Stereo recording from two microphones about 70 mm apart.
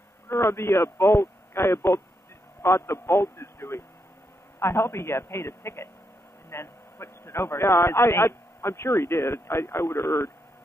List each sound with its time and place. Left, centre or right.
0.3 s a man's voice: left